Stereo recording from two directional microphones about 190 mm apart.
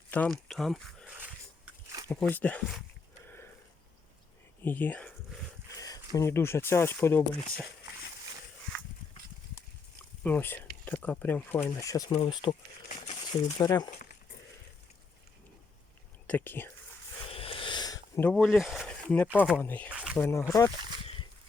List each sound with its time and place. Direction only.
0.1 s speech: 5° left (ahead or behind)
2.2 s speech: 10° left (ahead or behind)
4.6 s speech: 10° left (ahead or behind)
5.7 s speech: 20° left (ahead or behind)
10.2 s speech: 10° left (ahead or behind)
12.1 s speech: 25° left (ahead or behind)
13.6 s speech: 20° left (ahead or behind)
16.2 s speech: 10° left (ahead or behind)
17.2 s a sound: 30° left (ahead or behind); by 18.9 s centre (ahead or behind)
19.1 s speech: 10° left (ahead or behind)
19.9 s a sound: 5° right (ahead or behind)
20.1 s speech: 15° left (ahead or behind)